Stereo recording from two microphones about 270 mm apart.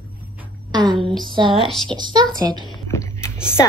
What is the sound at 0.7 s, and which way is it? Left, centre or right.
A woman's voice, centre.